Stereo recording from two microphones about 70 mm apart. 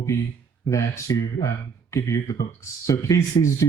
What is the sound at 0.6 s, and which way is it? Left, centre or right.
Speech, left.